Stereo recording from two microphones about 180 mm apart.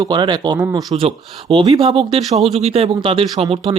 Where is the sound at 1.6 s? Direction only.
20° right (ahead or behind).